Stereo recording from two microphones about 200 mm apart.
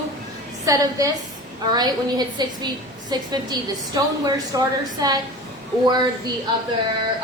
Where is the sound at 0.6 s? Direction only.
15° right (ahead or behind).